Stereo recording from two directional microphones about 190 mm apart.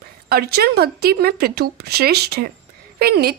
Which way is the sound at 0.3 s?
55° right (ahead or behind).